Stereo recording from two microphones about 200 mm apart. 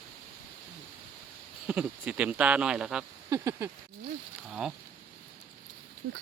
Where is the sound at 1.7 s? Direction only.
5° right (ahead or behind).